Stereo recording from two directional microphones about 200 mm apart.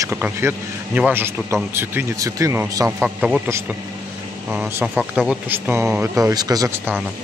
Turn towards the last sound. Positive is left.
turn(degrees=-15)  # may be behind; listen again after turning